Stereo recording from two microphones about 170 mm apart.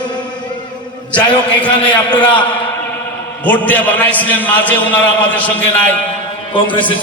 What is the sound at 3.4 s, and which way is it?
A man's voice, 10° left (ahead or behind).